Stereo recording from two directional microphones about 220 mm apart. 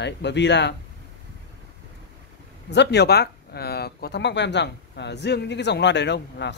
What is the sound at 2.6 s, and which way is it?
Speech, 50° left (ahead or behind).